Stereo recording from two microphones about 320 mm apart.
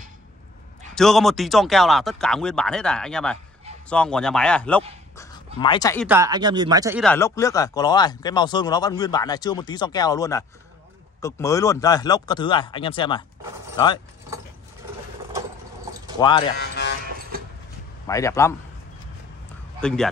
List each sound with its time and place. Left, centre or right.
0.9 s speech: centre
5.1 s a sound: centre
6.0 s speech: centre
7.0 s speech: centre
16.2 s speech: centre
16.5 s speech: left
17.3 s vehicle: right
18.0 s speech: centre
19.8 s speech: centre